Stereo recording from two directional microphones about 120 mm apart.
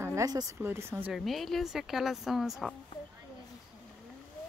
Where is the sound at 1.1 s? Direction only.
Centre (ahead or behind).